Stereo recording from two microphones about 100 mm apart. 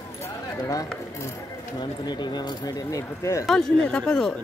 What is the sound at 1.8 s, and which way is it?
Speech, 50° left (ahead or behind).